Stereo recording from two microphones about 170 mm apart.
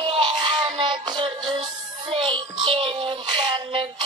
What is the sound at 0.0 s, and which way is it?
Music, 30° right (ahead or behind).